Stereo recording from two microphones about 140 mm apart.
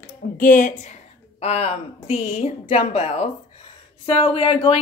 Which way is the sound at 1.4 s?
50° left (ahead or behind).